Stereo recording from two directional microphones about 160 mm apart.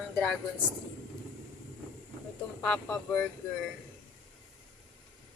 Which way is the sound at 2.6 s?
10° left (ahead or behind).